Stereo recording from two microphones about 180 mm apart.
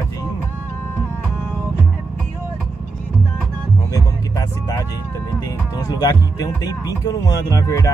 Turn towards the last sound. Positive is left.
turn(degrees=15)  # may be behind; listen again after turning